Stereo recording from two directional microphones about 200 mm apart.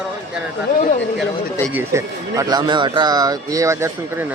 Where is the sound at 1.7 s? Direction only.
10° right (ahead or behind).